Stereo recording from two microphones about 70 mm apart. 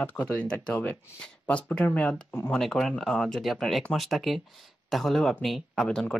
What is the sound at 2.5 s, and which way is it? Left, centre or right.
Speech, centre.